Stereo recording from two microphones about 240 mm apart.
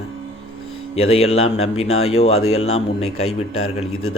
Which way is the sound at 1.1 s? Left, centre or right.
Left.